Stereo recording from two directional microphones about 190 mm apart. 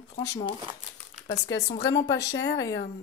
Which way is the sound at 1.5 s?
20° left (ahead or behind).